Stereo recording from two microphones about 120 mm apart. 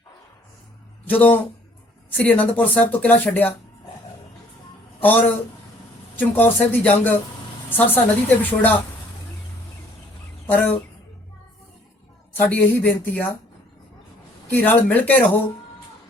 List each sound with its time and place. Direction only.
1.0 s speech: 15° left (ahead or behind)
4.9 s a man's voice: 15° left (ahead or behind)
10.4 s speech: 15° left (ahead or behind)
12.3 s speech: 15° left (ahead or behind)
14.5 s speech: 15° left (ahead or behind)